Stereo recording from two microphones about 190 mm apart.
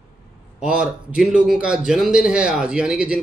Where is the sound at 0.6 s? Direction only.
5° right (ahead or behind).